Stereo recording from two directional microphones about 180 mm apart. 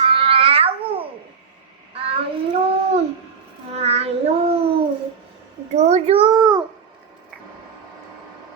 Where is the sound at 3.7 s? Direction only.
35° right (ahead or behind).